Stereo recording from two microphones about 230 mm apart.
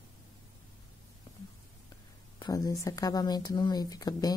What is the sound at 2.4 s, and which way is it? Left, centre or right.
A woman's voice, centre.